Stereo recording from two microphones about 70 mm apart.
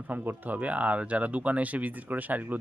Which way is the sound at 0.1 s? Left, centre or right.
Right.